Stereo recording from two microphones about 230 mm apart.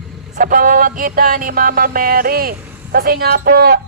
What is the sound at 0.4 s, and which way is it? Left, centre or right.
Music, right.